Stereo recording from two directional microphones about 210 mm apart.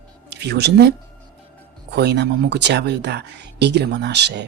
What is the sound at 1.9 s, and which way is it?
Speech, 55° right (ahead or behind).